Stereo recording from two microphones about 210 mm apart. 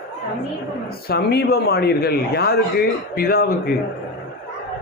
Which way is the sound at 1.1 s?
50° left (ahead or behind).